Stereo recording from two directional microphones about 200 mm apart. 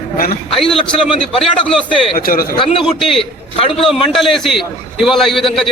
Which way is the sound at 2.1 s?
45° left (ahead or behind).